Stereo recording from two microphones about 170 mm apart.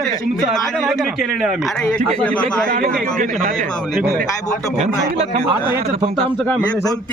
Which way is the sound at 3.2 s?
50° right (ahead or behind).